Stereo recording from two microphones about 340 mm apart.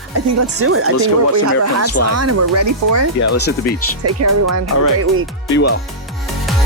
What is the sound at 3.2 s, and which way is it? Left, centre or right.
Speech, left.